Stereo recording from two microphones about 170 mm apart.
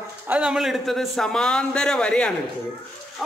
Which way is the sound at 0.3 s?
5° right (ahead or behind).